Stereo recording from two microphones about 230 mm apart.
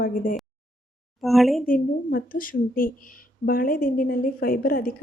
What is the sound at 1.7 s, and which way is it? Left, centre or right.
A woman's voice, left.